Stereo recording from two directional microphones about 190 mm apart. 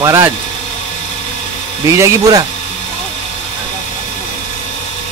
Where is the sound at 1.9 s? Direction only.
15° right (ahead or behind).